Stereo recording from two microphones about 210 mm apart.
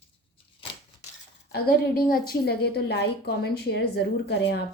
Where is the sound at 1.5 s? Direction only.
45° left (ahead or behind).